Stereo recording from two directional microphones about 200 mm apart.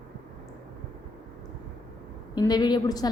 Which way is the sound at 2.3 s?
20° left (ahead or behind).